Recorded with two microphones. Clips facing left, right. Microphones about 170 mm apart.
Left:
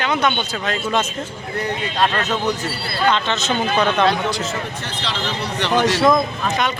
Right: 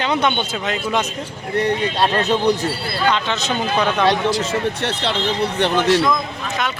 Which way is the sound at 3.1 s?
10° right (ahead or behind).